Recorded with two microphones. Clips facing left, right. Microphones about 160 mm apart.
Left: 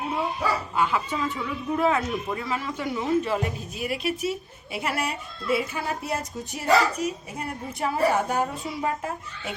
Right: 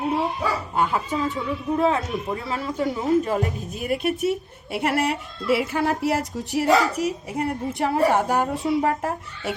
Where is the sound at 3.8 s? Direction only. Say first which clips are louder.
Right 4 dB; 55° right (ahead or behind).